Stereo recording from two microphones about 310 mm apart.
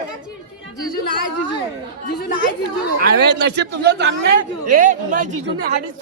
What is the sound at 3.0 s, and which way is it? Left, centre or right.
A man's voice, right.